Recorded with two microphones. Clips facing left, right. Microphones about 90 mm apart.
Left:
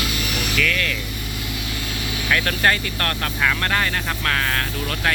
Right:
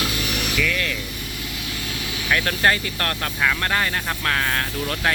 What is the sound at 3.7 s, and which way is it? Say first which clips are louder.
Speech: left 1 dB; 15° right (ahead or behind).